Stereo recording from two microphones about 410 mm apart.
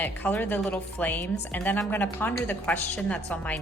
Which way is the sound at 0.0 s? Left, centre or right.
Centre.